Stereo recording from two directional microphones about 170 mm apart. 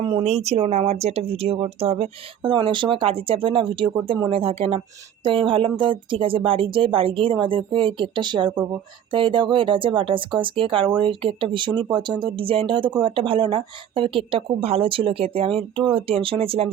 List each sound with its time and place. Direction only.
0.4 s speech: 35° right (ahead or behind)